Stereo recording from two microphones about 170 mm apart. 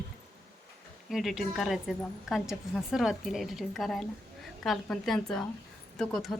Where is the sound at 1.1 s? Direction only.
Centre (ahead or behind).